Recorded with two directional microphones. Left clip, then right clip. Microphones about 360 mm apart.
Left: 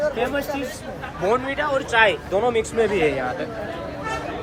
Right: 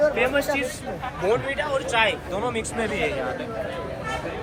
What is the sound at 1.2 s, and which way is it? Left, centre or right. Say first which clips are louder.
Speech: left 2 dB; left.